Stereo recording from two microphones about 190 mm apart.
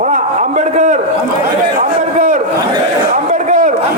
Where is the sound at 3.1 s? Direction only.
40° right (ahead or behind).